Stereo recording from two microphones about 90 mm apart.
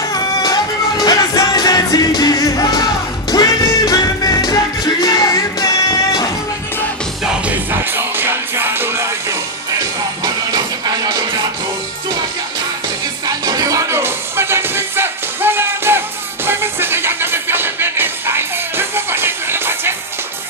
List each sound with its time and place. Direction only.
0.1 s music: 45° left (ahead or behind)
7.4 s music: 25° right (ahead or behind)
10.9 s music: 45° right (ahead or behind)
13.3 s music: 45° right (ahead or behind); by 19.9 s 25° right (ahead or behind)